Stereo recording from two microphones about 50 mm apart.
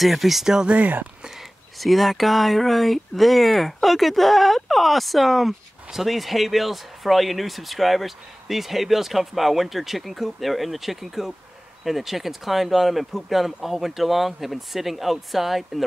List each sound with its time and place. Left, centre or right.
0.0 s speech: centre
0.7 s speech: right
1.8 s speech: centre